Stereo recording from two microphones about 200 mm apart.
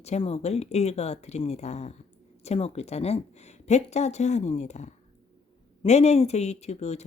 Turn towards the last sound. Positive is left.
turn(degrees=35)  # may be behind; listen again after turning